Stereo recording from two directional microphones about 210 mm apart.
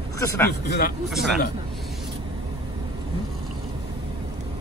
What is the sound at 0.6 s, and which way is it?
Speech, 50° left (ahead or behind).